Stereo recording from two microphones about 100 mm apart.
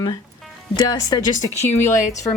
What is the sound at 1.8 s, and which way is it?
Speech, 30° left (ahead or behind).